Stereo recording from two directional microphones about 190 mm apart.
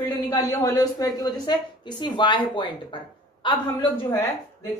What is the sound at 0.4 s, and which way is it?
A woman's voice, 15° left (ahead or behind).